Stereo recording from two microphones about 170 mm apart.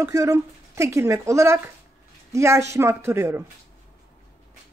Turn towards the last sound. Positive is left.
turn(degrees=-15)  # may be behind; listen again after turning